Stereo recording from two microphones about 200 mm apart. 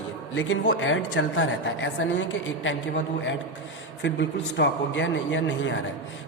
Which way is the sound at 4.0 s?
65° left (ahead or behind).